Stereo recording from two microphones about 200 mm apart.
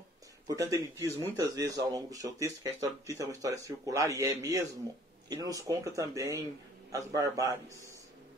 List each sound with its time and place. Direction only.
0.5 s speech: 15° right (ahead or behind)